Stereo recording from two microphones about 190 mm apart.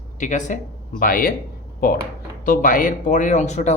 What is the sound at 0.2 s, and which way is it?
Speech, 40° left (ahead or behind).